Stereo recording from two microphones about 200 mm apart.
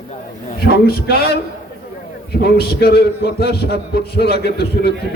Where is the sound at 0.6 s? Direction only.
50° left (ahead or behind).